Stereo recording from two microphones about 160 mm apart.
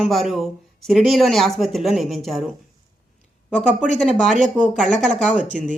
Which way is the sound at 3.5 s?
5° left (ahead or behind).